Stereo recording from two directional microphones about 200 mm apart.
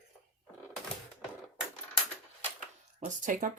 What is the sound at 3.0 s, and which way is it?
Speech, 40° right (ahead or behind).